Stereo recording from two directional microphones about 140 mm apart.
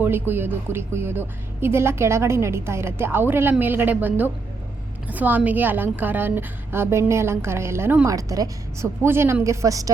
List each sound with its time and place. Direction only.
0.0 s a woman's voice: 15° right (ahead or behind)